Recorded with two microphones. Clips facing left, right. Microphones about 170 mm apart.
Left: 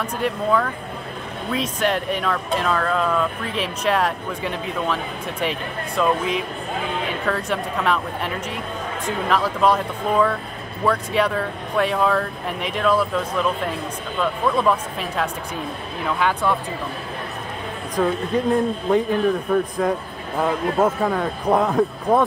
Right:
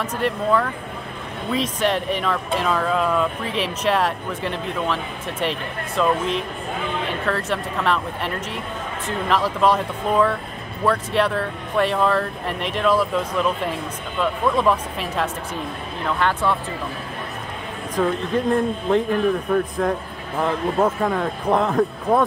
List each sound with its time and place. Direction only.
0.0 s speech: centre (ahead or behind)
17.9 s speech: centre (ahead or behind)